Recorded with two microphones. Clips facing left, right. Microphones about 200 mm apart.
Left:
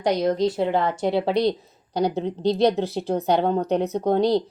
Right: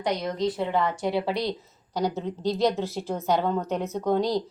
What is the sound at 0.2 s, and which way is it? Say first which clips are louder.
Speech: left 6 dB; 35° left (ahead or behind).